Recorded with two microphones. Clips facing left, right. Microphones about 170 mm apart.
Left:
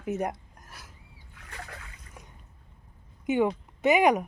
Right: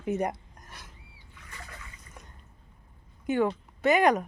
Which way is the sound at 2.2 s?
10° left (ahead or behind).